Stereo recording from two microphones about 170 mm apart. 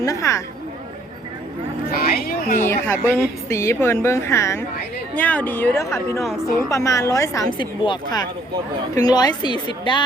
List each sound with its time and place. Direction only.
0.0 s a woman's voice: 20° left (ahead or behind)
1.9 s speech: 60° left (ahead or behind)
2.6 s a woman's voice: 15° left (ahead or behind)